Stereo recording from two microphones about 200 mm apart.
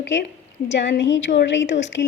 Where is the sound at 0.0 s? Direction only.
65° left (ahead or behind).